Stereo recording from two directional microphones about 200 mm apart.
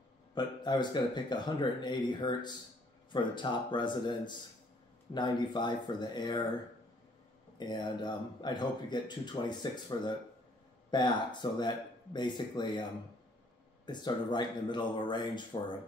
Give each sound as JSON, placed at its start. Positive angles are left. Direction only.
{"t": 0.3, "sound": "speech", "side_deg": 20}
{"t": 7.5, "sound": "speech", "side_deg": 20}
{"t": 13.8, "sound": "speech", "side_deg": 20}